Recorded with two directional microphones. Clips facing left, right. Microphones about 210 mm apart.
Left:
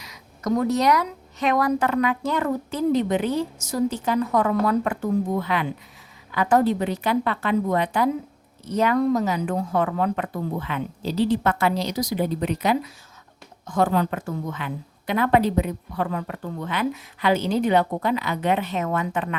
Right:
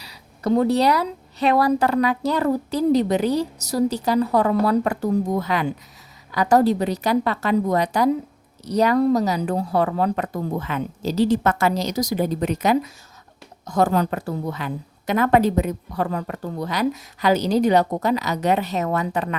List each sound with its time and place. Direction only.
0.0 s a woman's voice: 30° right (ahead or behind)